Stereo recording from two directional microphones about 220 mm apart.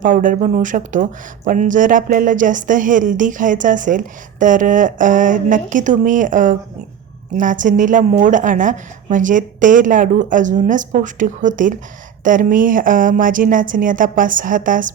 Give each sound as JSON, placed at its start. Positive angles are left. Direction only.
{"t": 0.0, "sound": "speech", "side_deg": -35}